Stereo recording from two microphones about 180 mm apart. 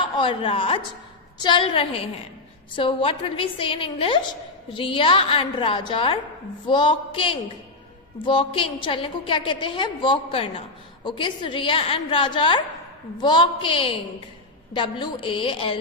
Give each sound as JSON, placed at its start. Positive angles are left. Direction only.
{"t": 0.0, "sound": "a woman's voice", "side_deg": 30}